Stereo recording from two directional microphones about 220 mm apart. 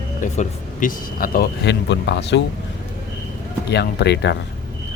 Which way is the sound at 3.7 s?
50° left (ahead or behind).